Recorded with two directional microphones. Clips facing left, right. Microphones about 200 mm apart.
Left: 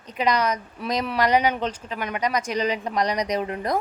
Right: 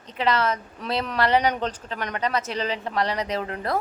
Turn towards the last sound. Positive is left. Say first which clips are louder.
# left 2 dB
turn(degrees=15)  # may be behind; listen again after turning